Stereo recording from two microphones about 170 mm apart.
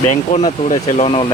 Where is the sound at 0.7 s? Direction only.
35° left (ahead or behind).